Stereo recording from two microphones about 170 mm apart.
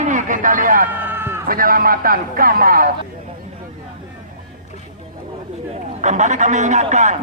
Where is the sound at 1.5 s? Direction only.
60° right (ahead or behind).